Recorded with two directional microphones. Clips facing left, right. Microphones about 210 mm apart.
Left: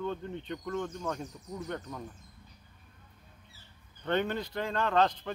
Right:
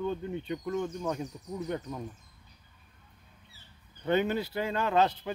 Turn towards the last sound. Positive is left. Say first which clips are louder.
# right 1 dB
turn(degrees=-10)  # may be behind; listen again after turning